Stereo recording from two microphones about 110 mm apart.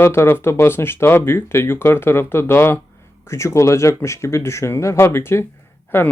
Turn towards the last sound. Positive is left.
turn(degrees=20)  # may be behind; listen again after turning